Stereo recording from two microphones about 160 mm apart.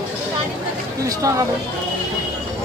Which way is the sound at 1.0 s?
20° right (ahead or behind).